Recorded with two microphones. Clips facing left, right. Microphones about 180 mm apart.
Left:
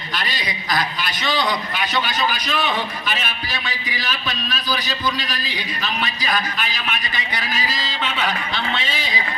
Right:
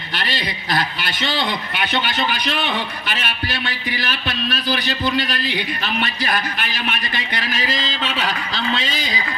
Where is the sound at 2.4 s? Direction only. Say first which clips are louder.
Even; 65° right (ahead or behind).